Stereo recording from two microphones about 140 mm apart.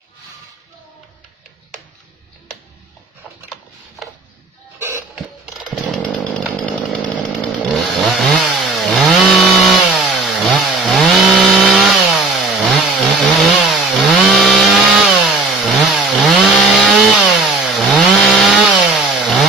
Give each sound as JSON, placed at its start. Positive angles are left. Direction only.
{"t": 4.0, "sound": "a sound", "side_deg": 0}
{"t": 4.7, "sound": "doorbell", "side_deg": -20}
{"t": 5.1, "sound": "chainsaw", "side_deg": -5}
{"t": 6.0, "sound": "chainsaw", "side_deg": 10}